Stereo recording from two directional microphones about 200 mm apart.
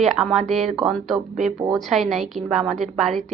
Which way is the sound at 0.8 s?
Centre (ahead or behind).